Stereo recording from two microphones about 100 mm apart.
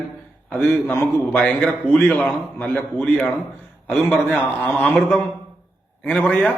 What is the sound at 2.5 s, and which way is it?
A man's voice, 20° left (ahead or behind).